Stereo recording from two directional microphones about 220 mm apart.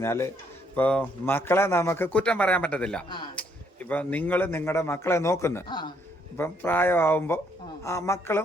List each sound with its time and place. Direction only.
0.0 s speech: 10° left (ahead or behind)